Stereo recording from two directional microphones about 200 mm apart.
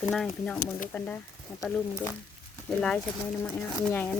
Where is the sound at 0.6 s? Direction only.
40° left (ahead or behind).